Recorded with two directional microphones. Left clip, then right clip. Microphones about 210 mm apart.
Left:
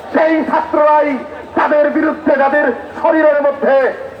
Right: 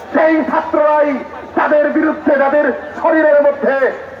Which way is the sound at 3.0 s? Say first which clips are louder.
Right 1 dB; 25° left (ahead or behind).